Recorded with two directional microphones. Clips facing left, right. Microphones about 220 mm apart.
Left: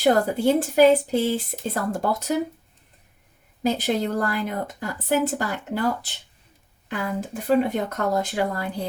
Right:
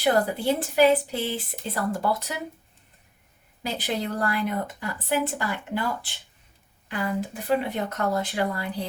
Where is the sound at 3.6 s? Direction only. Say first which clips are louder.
Left 6 dB; 45° left (ahead or behind).